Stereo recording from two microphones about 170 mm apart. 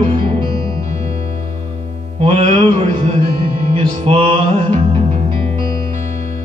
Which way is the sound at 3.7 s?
30° right (ahead or behind).